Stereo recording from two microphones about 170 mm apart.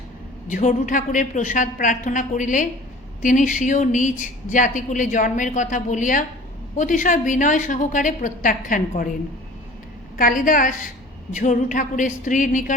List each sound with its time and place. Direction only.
0.5 s a woman's voice: 45° left (ahead or behind)
10.2 s a woman's voice: 50° left (ahead or behind)